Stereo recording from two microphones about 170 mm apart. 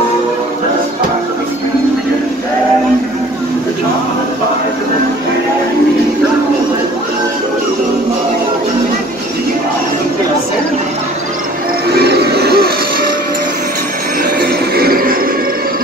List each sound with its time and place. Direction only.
12.0 s music: 70° right (ahead or behind)
14.4 s music: 60° right (ahead or behind)